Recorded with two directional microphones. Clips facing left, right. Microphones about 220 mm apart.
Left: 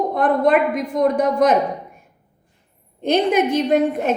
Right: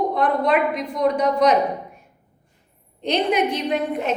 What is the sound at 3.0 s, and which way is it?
A woman's voice, 50° left (ahead or behind).